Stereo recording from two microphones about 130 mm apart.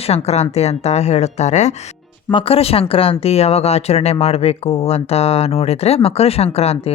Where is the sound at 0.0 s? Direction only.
55° left (ahead or behind).